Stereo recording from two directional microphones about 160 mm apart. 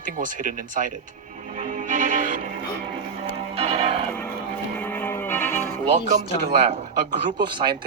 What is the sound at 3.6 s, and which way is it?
Music, 40° right (ahead or behind).